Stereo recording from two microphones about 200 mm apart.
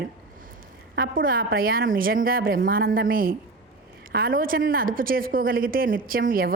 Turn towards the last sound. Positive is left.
turn(degrees=-45)  # may be behind; listen again after turning